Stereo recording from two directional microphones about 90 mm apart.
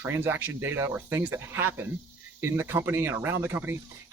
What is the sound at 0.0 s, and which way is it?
Speech, 25° right (ahead or behind).